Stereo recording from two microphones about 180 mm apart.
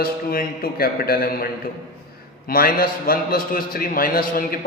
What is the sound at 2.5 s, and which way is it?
A man's voice, 55° left (ahead or behind).